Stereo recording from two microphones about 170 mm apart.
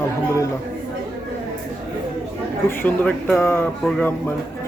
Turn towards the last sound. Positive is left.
turn(degrees=10)  # may be behind; listen again after turning